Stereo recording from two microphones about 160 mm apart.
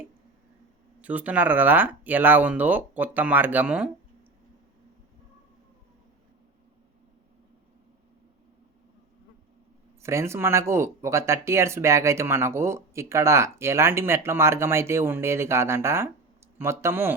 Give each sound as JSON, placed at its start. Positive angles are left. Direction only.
{"t": 1.0, "sound": "speech", "side_deg": -10}
{"t": 10.0, "sound": "speech", "side_deg": -15}